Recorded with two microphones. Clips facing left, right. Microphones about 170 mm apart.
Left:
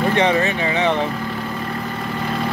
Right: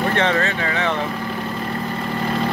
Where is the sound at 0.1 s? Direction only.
15° left (ahead or behind).